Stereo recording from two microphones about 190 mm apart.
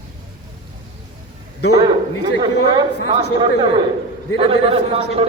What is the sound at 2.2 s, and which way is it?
Speech, 20° right (ahead or behind).